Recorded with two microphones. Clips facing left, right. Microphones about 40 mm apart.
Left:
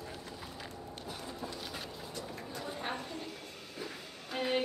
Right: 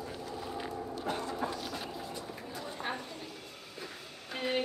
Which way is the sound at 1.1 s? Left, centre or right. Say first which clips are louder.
Right 9 dB; right.